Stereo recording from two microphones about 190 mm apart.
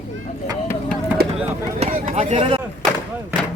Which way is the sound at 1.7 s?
35° right (ahead or behind).